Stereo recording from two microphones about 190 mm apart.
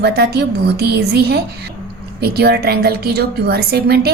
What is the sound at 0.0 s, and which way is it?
A woman's voice, 55° right (ahead or behind).